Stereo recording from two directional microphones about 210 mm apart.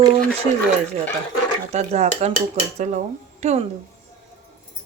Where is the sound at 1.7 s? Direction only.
30° right (ahead or behind).